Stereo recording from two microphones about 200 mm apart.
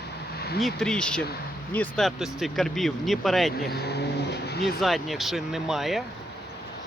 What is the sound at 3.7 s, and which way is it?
Speech, 55° left (ahead or behind).